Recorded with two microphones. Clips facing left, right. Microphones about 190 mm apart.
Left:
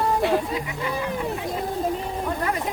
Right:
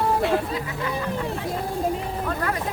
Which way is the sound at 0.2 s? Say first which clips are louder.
Left 1 dB; centre (ahead or behind).